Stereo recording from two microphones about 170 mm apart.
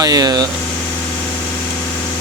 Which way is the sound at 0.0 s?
20° right (ahead or behind).